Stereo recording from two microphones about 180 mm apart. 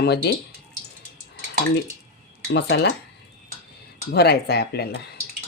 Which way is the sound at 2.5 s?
70° left (ahead or behind).